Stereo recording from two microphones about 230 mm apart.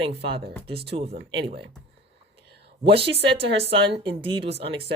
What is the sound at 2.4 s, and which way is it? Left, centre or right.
Whispering, right.